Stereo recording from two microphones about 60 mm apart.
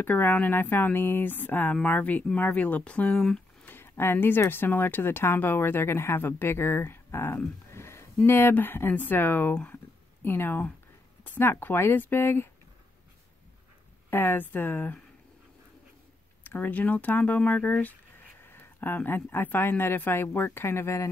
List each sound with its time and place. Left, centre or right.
0.0 s speech: left
3.6 s a sound: left
4.5 s speech: left
14.1 s speech: left
16.4 s speech: left
18.4 s speech: left